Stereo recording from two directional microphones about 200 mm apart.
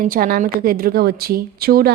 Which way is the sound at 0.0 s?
45° right (ahead or behind).